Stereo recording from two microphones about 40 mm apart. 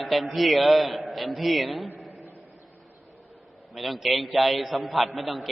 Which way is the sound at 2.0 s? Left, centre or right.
Centre.